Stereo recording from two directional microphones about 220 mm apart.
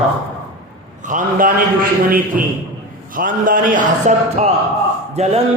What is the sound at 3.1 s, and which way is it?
A man's voice, 40° right (ahead or behind).